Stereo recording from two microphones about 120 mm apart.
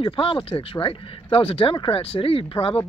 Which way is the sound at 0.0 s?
50° left (ahead or behind).